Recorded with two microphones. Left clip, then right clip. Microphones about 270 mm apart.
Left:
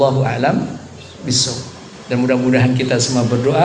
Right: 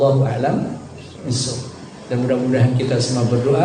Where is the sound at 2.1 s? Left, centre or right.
Left.